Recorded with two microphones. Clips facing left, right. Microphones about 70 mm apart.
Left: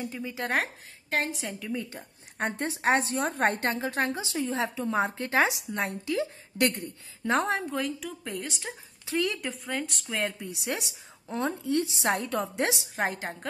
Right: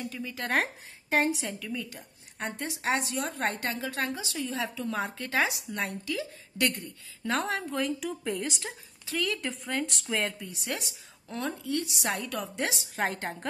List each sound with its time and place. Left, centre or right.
0.0 s a woman's voice: left
1.1 s a woman's voice: centre
1.6 s a woman's voice: left
7.6 s a woman's voice: centre
9.0 s speech: left
9.4 s a woman's voice: centre
10.4 s a woman's voice: centre
12.9 s a woman's voice: centre